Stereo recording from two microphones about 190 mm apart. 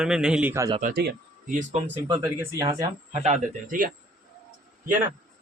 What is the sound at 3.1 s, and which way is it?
Speech, 40° right (ahead or behind).